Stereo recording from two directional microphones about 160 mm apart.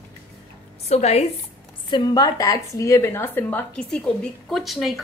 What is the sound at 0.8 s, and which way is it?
Speech, 40° left (ahead or behind).